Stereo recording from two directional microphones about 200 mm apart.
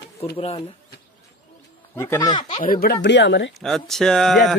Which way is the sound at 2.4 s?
45° left (ahead or behind).